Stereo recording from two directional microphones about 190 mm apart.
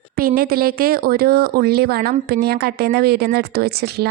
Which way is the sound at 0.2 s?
50° right (ahead or behind).